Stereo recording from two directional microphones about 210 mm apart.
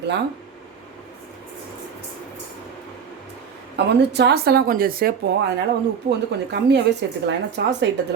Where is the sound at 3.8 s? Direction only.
55° right (ahead or behind).